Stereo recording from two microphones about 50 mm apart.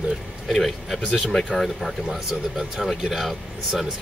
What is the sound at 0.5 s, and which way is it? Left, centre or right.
Speech, centre.